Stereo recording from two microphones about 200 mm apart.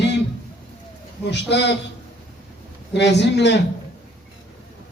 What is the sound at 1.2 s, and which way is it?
Speech, 60° left (ahead or behind).